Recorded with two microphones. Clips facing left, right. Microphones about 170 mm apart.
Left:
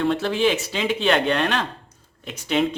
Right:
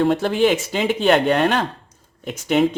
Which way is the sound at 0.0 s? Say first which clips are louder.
Right 4 dB; 45° right (ahead or behind).